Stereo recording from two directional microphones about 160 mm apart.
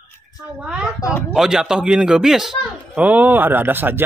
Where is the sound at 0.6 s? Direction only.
5° right (ahead or behind).